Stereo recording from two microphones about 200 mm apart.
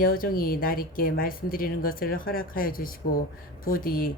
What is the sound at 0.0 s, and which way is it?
Speech, 45° left (ahead or behind).